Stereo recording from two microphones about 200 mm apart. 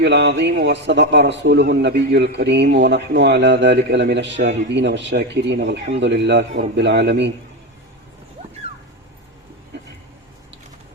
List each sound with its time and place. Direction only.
0.0 s a man's voice: 60° right (ahead or behind)